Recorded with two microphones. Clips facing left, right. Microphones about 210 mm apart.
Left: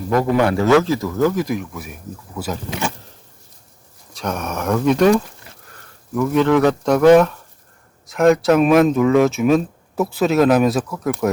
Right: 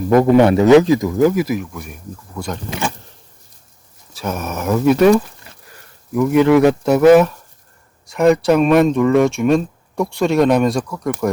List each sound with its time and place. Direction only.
0.2 s speech: 20° right (ahead or behind); by 2.6 s 5° left (ahead or behind)
4.1 s speech: 5° right (ahead or behind)
6.1 s speech: 10° right (ahead or behind); by 11.3 s 5° left (ahead or behind)